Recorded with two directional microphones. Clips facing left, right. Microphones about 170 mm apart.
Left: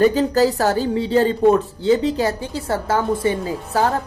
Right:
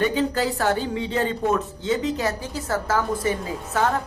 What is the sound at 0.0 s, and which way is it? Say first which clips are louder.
A woman's voice: left 7 dB; 40° left (ahead or behind).